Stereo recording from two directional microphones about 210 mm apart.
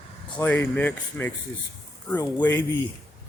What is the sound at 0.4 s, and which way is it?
Speech, 10° left (ahead or behind).